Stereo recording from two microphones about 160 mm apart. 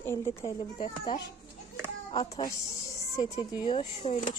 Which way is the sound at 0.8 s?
30° left (ahead or behind).